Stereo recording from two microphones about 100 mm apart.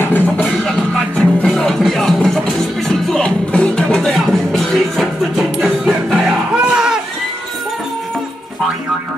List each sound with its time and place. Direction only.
0.0 s music: 20° left (ahead or behind)
0.5 s music: 5° left (ahead or behind)
6.5 s a sound: 5° right (ahead or behind)